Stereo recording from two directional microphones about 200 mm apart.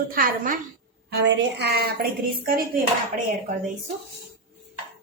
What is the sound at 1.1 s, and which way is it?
Speech, 55° right (ahead or behind).